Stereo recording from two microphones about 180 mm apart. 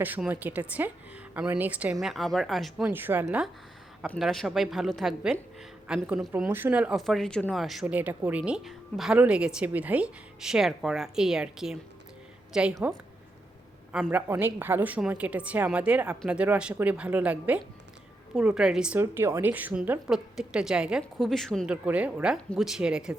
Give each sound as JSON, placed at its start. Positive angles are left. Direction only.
{"t": 0.0, "sound": "a woman's voice", "side_deg": -10}
{"t": 2.9, "sound": "a woman's voice", "side_deg": -10}
{"t": 12.7, "sound": "a woman's voice", "side_deg": -15}
{"t": 13.9, "sound": "a woman's voice", "side_deg": -5}